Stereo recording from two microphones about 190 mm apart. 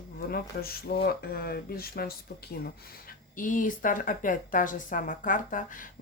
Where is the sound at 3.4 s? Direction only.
45° left (ahead or behind).